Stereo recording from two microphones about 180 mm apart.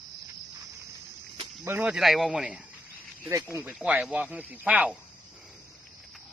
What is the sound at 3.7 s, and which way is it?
Speech, centre (ahead or behind).